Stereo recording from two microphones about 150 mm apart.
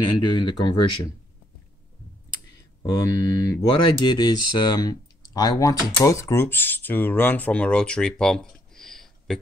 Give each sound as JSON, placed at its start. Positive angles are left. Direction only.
{"t": 0.0, "sound": "speech", "side_deg": 30}
{"t": 2.3, "sound": "speech", "side_deg": 25}